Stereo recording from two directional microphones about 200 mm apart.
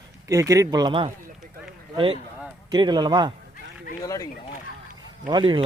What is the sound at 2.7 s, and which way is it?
Speech, 20° right (ahead or behind).